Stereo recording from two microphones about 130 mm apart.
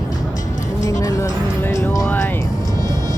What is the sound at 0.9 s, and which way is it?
Music, 25° left (ahead or behind).